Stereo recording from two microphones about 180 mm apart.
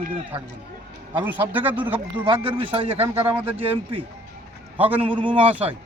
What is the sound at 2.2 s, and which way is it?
Speech, 30° right (ahead or behind).